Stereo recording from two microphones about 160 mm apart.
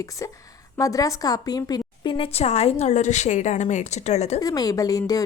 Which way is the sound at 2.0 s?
35° left (ahead or behind).